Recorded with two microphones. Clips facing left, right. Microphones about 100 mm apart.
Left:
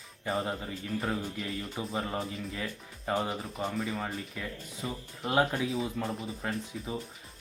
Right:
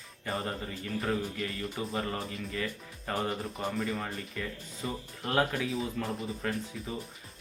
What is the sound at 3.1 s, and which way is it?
Speech, 15° left (ahead or behind).